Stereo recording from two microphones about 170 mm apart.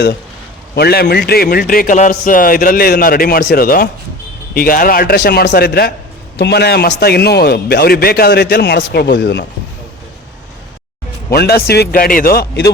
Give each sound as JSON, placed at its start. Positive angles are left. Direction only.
{"t": 0.8, "sound": "a man's voice", "side_deg": 70}
{"t": 11.3, "sound": "a man's voice", "side_deg": 65}